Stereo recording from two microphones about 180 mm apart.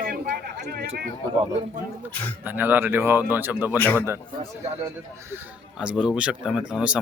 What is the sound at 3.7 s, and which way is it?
Speech, 10° left (ahead or behind).